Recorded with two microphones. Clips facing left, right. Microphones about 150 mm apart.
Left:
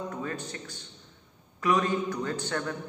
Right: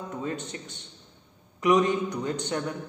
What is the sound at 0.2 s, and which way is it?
Mantra, 20° right (ahead or behind).